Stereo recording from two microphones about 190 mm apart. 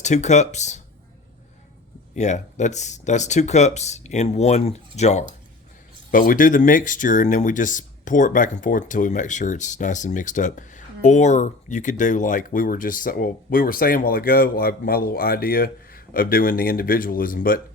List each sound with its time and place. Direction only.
0.0 s speech: 35° left (ahead or behind)
2.1 s speech: 40° left (ahead or behind)